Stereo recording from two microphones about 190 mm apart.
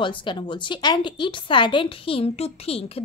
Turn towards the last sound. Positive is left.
turn(degrees=30)  # may be behind; listen again after turning